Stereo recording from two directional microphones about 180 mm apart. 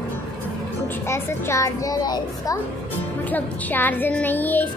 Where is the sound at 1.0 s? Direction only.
15° left (ahead or behind).